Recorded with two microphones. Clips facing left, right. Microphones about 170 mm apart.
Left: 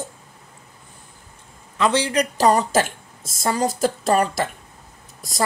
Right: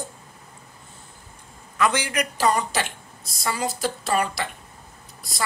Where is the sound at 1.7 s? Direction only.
30° left (ahead or behind).